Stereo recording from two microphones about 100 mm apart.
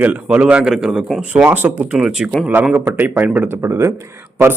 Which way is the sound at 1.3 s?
15° right (ahead or behind).